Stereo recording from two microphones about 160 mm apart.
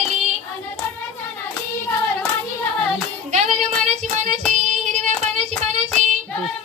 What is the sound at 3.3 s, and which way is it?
Child singing, 45° right (ahead or behind).